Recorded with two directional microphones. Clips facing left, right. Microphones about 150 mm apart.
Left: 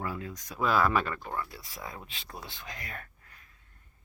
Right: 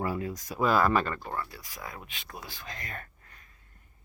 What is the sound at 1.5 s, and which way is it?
Speech, 25° left (ahead or behind).